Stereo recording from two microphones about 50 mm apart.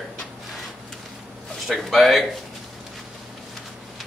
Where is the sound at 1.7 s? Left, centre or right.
Centre.